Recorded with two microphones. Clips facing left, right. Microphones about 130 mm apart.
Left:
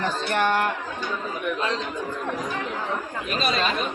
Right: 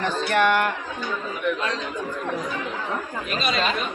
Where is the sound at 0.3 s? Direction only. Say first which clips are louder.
Right 3 dB; 30° left (ahead or behind).